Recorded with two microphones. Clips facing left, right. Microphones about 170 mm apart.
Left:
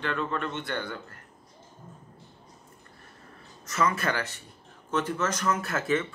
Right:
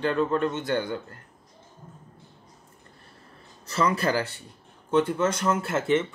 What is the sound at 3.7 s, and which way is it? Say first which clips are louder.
A man's voice: right 3 dB; 30° right (ahead or behind).